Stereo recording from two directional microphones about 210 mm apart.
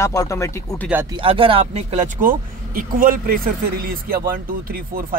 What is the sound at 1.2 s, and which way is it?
Speech, 25° right (ahead or behind).